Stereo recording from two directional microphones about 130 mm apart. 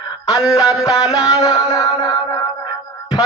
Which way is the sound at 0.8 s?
50° left (ahead or behind).